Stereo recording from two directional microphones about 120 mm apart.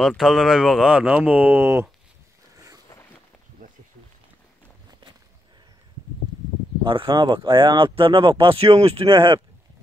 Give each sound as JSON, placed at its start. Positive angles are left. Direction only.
{"t": 0.2, "sound": "speech", "side_deg": 0}
{"t": 6.8, "sound": "speech", "side_deg": -45}